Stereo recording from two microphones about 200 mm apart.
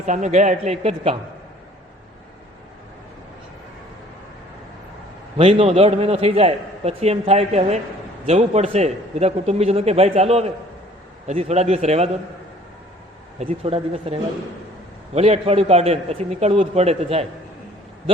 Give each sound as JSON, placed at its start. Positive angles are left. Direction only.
{"t": 0.0, "sound": "a man's voice", "side_deg": -35}
{"t": 5.4, "sound": "a man's voice", "side_deg": -30}
{"t": 13.4, "sound": "a man's voice", "side_deg": -30}